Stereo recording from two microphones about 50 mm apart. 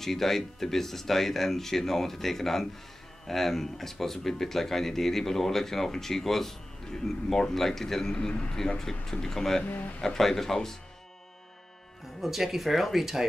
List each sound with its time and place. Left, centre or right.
0.0 s speech: centre
9.7 s speech: left
9.9 s speech: centre
12.2 s speech: centre